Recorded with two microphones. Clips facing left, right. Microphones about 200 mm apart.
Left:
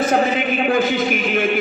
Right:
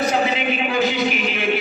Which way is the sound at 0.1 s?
50° left (ahead or behind).